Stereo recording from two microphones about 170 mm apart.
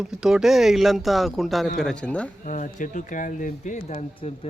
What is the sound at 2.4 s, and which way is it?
Speech, 50° left (ahead or behind).